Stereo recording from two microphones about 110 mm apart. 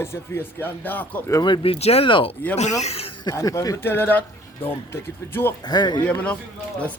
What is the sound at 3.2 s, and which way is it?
Speech, 30° left (ahead or behind).